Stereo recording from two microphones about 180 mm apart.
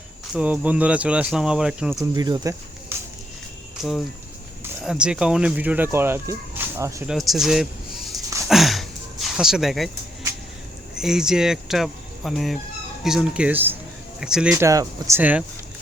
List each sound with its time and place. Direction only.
0.3 s speech: 5° right (ahead or behind)
2.0 s speech: 20° right (ahead or behind)
3.8 s speech: centre (ahead or behind)
7.1 s speech: centre (ahead or behind)
8.1 s a sound: centre (ahead or behind)
10.9 s speech: 5° right (ahead or behind)
14.5 s speech: 15° right (ahead or behind)